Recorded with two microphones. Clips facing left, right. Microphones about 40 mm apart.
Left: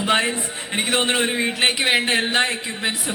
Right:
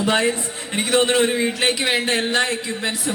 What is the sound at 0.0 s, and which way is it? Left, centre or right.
A man's voice, left.